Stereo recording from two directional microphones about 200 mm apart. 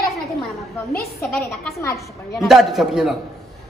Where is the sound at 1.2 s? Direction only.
5° left (ahead or behind).